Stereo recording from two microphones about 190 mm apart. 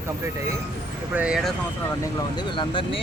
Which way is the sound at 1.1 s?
5° right (ahead or behind).